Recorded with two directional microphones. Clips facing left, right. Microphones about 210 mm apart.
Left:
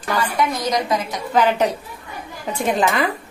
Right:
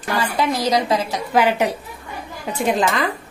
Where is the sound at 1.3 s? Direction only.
10° right (ahead or behind).